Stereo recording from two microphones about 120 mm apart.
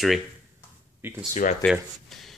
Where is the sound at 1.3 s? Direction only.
90° left.